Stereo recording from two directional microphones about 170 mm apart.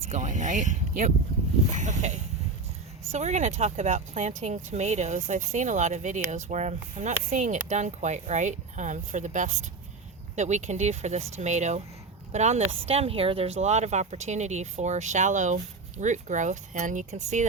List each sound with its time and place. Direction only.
0.1 s speech: 45° right (ahead or behind)